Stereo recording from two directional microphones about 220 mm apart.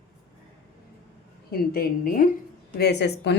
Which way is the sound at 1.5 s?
45° left (ahead or behind).